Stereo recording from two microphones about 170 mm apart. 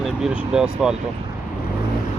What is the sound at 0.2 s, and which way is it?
Speech, 5° right (ahead or behind).